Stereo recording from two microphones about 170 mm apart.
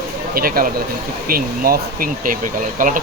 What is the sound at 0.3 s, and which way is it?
Speech, 60° right (ahead or behind).